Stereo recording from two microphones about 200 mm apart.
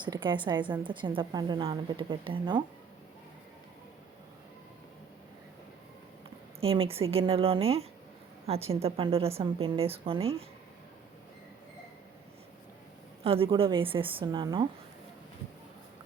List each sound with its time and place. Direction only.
0.0 s a woman's voice: 25° right (ahead or behind)
6.6 s a woman's voice: 30° right (ahead or behind)
13.2 s a woman's voice: 25° right (ahead or behind)